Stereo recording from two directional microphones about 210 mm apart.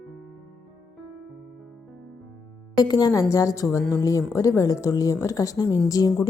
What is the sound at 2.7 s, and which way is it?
A woman's voice, 20° left (ahead or behind).